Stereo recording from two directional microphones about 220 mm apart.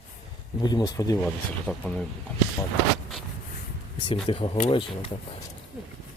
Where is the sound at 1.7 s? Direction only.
5° left (ahead or behind).